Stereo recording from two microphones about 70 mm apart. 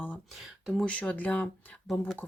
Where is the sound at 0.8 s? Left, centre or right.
Centre.